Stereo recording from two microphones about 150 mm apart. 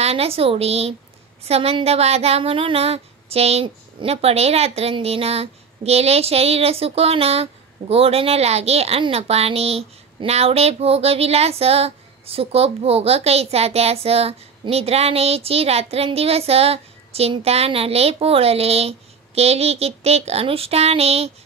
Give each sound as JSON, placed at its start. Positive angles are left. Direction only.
{"t": 0.0, "sound": "a child's voice", "side_deg": -40}